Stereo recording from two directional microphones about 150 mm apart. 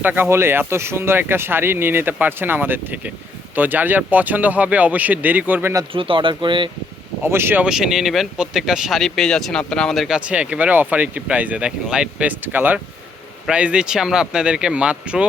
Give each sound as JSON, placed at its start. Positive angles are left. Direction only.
{"t": 0.0, "sound": "speech", "side_deg": -15}
{"t": 5.9, "sound": "speech", "side_deg": -35}
{"t": 7.2, "sound": "speech", "side_deg": -15}